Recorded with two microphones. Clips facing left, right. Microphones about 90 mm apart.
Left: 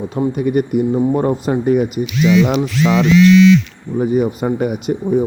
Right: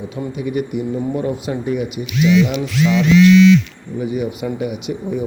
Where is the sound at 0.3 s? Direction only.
50° left (ahead or behind).